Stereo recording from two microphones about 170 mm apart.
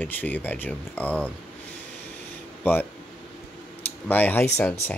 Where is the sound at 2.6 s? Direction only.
10° left (ahead or behind).